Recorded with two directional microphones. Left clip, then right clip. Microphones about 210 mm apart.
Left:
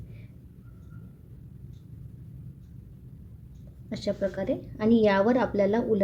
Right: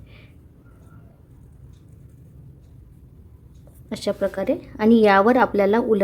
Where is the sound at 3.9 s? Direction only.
40° right (ahead or behind).